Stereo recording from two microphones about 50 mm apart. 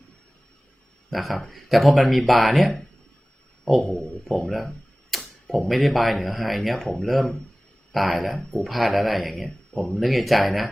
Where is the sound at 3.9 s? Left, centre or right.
Centre.